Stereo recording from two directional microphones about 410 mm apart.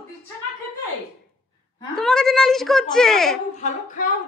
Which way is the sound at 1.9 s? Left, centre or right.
Centre.